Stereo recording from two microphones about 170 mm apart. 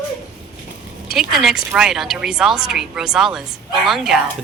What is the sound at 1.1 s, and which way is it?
Speech, centre (ahead or behind).